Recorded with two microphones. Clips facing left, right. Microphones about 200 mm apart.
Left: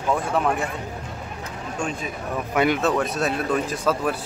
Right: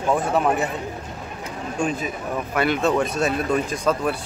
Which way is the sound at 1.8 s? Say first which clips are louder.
Right 4 dB; 5° right (ahead or behind).